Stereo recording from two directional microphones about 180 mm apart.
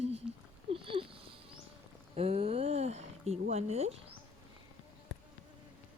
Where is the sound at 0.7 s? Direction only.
30° right (ahead or behind).